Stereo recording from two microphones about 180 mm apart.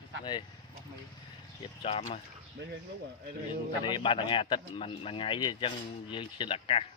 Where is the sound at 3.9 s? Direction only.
25° left (ahead or behind).